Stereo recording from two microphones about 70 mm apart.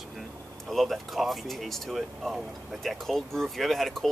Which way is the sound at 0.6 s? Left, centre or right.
Centre.